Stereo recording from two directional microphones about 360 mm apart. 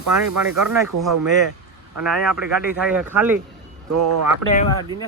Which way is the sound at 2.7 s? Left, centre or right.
Centre.